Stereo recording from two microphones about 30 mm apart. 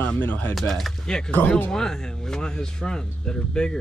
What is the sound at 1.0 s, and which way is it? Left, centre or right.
Speech, left.